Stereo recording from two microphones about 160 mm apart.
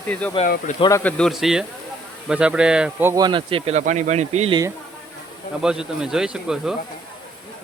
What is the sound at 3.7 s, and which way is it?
Speech, 50° right (ahead or behind).